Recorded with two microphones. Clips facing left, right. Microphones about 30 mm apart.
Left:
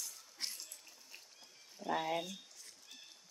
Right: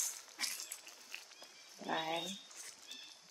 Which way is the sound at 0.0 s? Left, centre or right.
Right.